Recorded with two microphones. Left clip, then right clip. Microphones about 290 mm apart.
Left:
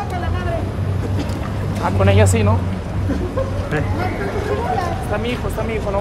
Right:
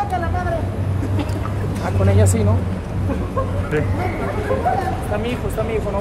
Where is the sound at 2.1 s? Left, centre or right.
Centre.